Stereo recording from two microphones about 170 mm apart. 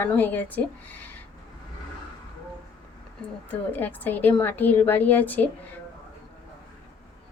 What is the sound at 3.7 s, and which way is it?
Speech, 10° left (ahead or behind).